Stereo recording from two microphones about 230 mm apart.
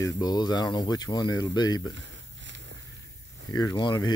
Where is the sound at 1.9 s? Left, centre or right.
Right.